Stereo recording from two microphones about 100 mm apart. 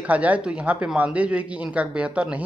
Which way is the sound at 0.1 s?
15° right (ahead or behind).